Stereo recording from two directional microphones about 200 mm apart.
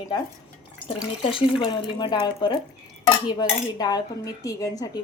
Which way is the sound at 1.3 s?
25° left (ahead or behind).